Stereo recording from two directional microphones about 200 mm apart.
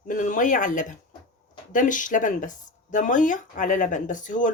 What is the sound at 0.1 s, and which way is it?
Speech, 40° left (ahead or behind).